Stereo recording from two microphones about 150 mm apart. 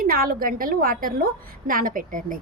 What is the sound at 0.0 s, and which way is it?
A woman's voice, 75° right (ahead or behind).